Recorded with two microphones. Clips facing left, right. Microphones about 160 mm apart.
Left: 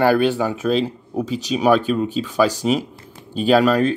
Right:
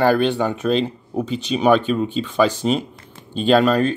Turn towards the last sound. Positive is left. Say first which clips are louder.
# even
turn(degrees=5)  # may be behind; listen again after turning